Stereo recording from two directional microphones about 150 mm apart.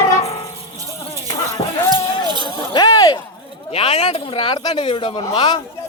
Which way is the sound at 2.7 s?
25° left (ahead or behind).